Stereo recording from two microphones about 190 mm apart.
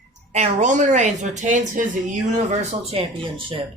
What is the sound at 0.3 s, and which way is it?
A woman's voice, 40° right (ahead or behind).